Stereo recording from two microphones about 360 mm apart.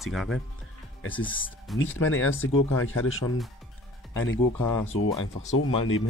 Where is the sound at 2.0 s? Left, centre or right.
Left.